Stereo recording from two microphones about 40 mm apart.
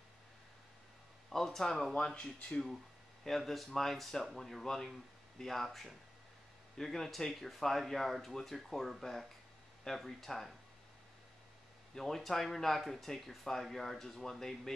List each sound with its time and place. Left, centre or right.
1.3 s speech: centre
2.0 s speech: centre
3.3 s speech: centre
12.0 s speech: centre